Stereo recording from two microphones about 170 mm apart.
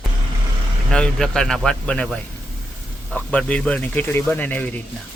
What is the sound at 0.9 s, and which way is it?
A man's voice, 5° left (ahead or behind).